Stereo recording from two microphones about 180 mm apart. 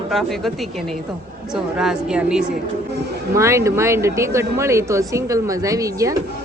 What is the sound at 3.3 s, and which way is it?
A woman's voice, 15° right (ahead or behind).